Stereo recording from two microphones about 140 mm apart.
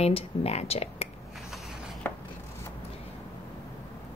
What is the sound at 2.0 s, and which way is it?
Rub, 15° left (ahead or behind).